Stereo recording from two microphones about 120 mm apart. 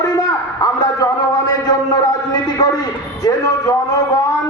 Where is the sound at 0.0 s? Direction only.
35° left (ahead or behind).